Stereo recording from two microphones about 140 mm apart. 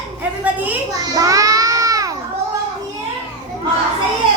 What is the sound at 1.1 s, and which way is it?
Child singing, 25° right (ahead or behind).